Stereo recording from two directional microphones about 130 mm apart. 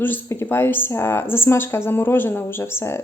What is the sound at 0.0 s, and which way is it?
Speech, 20° left (ahead or behind).